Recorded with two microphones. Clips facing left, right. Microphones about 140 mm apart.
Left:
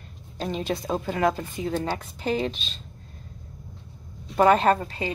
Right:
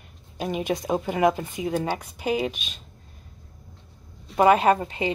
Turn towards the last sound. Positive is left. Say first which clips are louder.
# right 3 dB
turn(degrees=-20)  # may be behind; listen again after turning